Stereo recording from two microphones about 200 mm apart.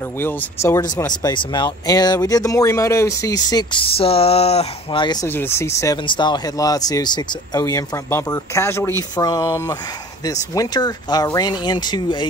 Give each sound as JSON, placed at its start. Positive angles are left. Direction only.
{"t": 0.2, "sound": "speech", "side_deg": 10}